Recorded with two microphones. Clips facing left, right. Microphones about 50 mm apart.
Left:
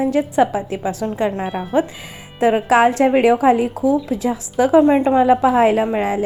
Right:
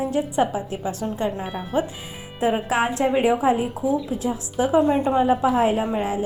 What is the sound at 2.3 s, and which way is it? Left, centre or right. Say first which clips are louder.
Speech: left 7 dB; left.